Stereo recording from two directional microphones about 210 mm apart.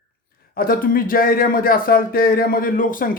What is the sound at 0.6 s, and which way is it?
Speech, 45° left (ahead or behind).